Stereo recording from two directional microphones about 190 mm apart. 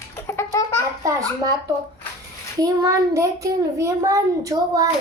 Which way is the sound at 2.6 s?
20° right (ahead or behind).